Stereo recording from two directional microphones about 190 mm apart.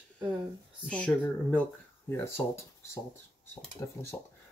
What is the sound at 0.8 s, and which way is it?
Speech, 5° left (ahead or behind).